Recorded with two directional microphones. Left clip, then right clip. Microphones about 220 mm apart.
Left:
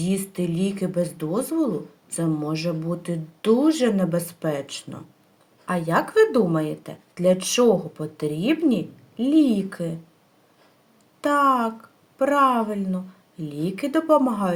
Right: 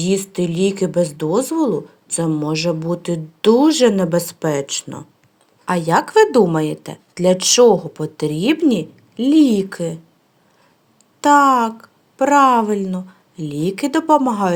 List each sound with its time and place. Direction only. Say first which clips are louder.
0.0 s a woman's voice: right 8 dB; 40° right (ahead or behind)
11.2 s a woman's voice: right 7 dB; 45° right (ahead or behind)